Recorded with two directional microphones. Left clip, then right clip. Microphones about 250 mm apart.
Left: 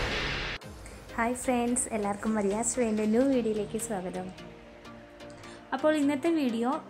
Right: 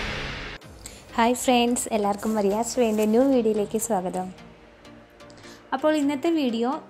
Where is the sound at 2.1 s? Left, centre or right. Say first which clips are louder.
Right 6 dB; centre.